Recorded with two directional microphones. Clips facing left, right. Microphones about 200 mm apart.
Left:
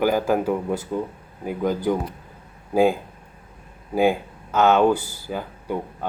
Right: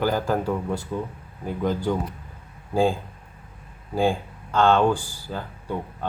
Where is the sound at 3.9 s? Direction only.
10° left (ahead or behind).